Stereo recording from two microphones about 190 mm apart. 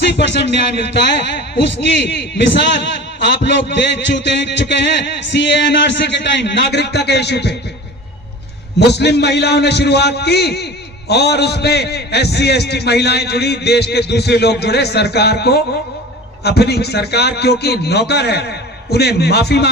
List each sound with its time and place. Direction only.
0.0 s speech: 65° left (ahead or behind)
1.8 s a man's voice: 65° left (ahead or behind)
8.8 s a man's voice: 60° left (ahead or behind)